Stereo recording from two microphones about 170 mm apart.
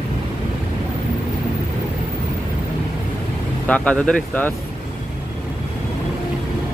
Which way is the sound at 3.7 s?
5° left (ahead or behind).